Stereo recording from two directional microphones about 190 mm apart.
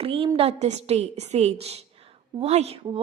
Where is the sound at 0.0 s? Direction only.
30° right (ahead or behind).